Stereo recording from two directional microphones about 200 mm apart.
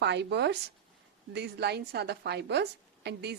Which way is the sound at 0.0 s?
60° right (ahead or behind).